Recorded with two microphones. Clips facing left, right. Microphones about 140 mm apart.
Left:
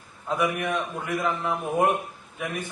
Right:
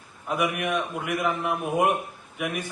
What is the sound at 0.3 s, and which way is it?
A man's voice, 15° right (ahead or behind).